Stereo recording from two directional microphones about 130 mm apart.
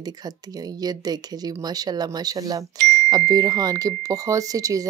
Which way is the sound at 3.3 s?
30° right (ahead or behind).